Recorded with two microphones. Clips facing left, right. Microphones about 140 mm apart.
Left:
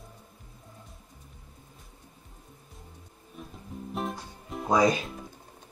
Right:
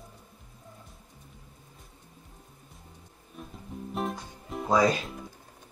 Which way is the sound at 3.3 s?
Centre (ahead or behind).